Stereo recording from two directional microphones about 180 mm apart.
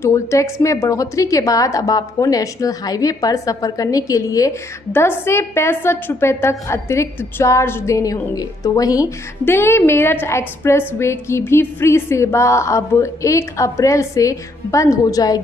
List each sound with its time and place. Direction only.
0.0 s a woman's voice: 15° left (ahead or behind)